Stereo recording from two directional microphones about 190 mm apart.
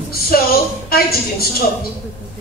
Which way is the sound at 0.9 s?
55° left (ahead or behind).